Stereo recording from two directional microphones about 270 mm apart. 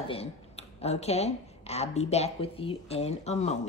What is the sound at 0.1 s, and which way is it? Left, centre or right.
Speech, left.